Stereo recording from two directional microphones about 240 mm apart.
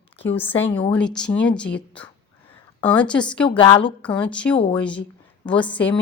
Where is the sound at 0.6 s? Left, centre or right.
Centre.